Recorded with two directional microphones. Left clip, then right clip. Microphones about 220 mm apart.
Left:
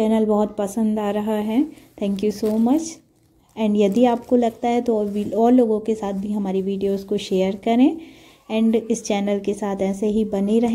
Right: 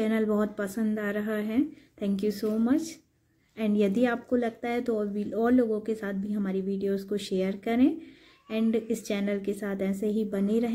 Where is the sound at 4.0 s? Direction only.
20° left (ahead or behind).